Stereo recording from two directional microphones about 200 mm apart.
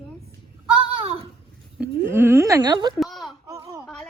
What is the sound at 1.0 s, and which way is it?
Babbling, 30° right (ahead or behind).